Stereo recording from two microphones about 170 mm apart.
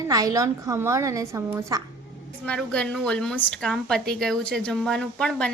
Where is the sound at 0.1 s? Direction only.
20° right (ahead or behind).